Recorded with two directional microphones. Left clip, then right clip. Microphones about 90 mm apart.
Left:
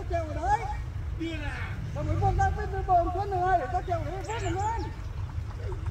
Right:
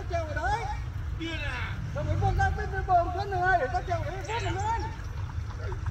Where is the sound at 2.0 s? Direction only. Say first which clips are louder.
Left 2 dB; 15° left (ahead or behind).